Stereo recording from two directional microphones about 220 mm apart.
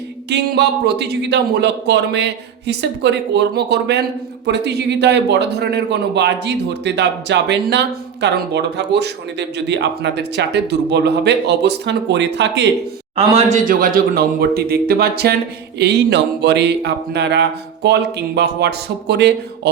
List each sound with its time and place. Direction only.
0.3 s a man's voice: 50° right (ahead or behind)
13.1 s a man's voice: 30° right (ahead or behind); by 19.7 s 50° right (ahead or behind)